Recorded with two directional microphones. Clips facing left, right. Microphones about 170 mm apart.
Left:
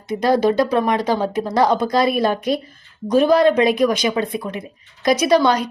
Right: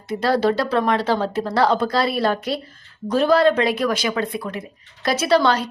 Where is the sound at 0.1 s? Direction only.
15° left (ahead or behind).